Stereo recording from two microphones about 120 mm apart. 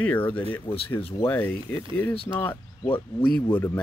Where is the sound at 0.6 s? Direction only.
50° left (ahead or behind).